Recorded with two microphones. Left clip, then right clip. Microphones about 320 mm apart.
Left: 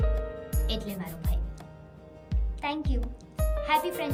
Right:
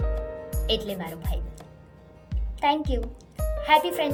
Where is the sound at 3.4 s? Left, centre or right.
Centre.